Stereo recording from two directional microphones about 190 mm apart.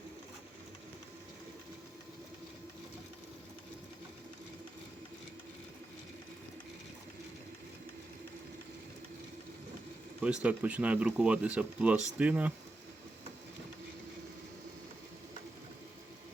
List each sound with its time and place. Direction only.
10.2 s speech: 5° right (ahead or behind)